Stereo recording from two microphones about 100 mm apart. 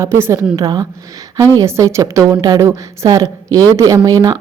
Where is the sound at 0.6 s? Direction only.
45° right (ahead or behind).